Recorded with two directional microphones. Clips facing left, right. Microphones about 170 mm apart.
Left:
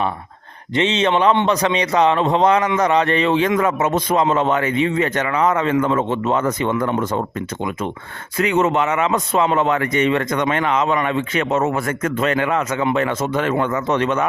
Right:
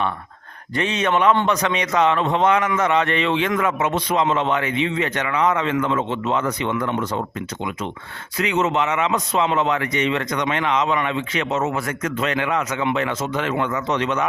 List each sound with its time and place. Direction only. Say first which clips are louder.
0.8 s a man's voice: left 3 dB; 25° left (ahead or behind); by 14.3 s 50° left (ahead or behind)